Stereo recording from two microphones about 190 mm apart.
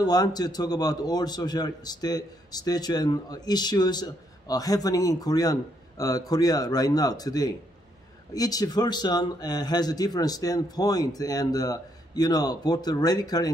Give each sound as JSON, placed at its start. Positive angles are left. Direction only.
{"t": 0.0, "sound": "a man's voice", "side_deg": 20}